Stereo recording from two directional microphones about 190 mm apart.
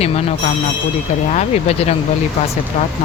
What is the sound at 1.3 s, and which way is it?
Speech, 35° left (ahead or behind).